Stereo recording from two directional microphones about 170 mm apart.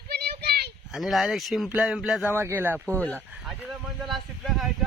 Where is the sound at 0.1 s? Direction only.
70° right (ahead or behind).